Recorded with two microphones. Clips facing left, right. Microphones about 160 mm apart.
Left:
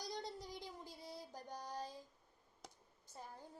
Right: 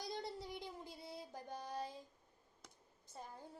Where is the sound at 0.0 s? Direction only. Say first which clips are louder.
Right 1 dB; 25° right (ahead or behind).